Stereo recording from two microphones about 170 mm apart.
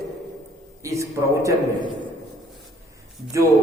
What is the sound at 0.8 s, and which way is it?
Speech, 15° right (ahead or behind).